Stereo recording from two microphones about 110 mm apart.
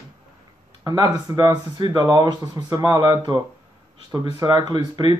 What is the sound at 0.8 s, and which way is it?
Speech, 35° right (ahead or behind).